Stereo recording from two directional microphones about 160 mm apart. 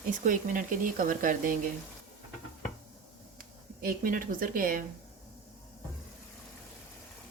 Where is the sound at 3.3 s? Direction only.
60° right (ahead or behind).